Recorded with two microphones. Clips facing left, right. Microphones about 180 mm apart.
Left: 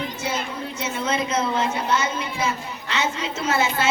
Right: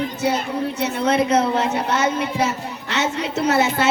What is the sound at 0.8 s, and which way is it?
A woman's voice, 65° right (ahead or behind).